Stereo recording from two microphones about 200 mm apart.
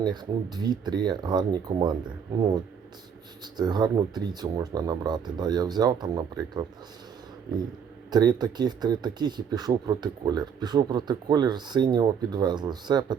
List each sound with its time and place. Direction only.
0.0 s speech: 20° right (ahead or behind)
3.4 s speech: 20° right (ahead or behind)
8.1 s speech: 20° right (ahead or behind)